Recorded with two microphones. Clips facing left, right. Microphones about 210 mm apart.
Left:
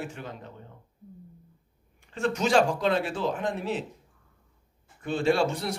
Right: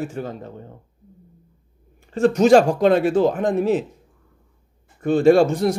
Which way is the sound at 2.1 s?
40° right (ahead or behind).